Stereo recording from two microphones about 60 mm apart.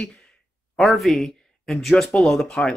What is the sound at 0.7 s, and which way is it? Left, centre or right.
Speech, centre.